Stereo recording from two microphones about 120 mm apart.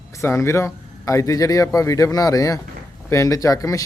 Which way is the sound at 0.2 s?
25° left (ahead or behind).